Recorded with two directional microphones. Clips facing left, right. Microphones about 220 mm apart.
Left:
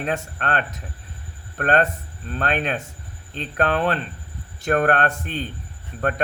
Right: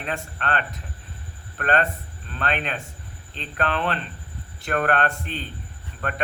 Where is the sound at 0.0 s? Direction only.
45° left (ahead or behind).